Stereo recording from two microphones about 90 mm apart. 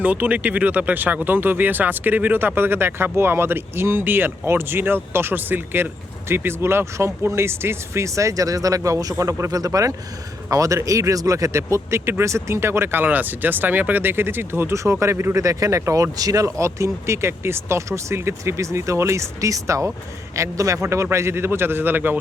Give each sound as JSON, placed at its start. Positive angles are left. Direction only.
{"t": 0.0, "sound": "speech", "side_deg": -20}
{"t": 15.4, "sound": "speech", "side_deg": -40}